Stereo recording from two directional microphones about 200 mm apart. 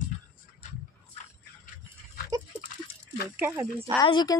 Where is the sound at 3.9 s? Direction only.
20° left (ahead or behind).